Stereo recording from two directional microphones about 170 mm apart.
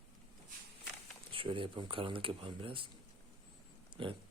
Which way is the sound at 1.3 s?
30° right (ahead or behind).